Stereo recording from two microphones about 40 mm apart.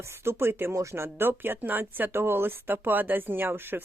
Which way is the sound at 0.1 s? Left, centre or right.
Right.